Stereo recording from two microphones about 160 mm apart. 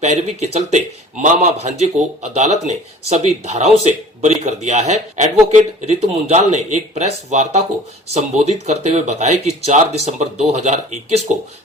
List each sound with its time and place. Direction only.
0.0 s speech: 45° right (ahead or behind)